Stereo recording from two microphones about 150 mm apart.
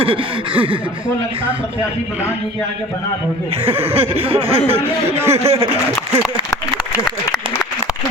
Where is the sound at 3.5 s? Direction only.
40° right (ahead or behind).